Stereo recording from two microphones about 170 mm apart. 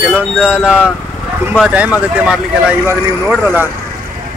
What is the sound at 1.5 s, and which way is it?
Speech, 5° right (ahead or behind).